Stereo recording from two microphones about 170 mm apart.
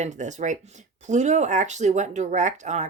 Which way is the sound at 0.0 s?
45° right (ahead or behind).